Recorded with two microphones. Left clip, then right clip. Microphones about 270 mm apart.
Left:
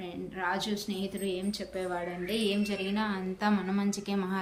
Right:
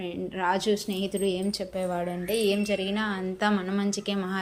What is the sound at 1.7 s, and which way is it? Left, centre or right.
A woman's voice, right.